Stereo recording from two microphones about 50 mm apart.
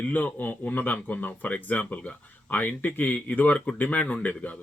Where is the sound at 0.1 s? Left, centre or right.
Left.